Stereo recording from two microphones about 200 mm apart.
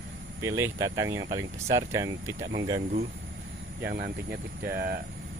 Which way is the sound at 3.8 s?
50° right (ahead or behind).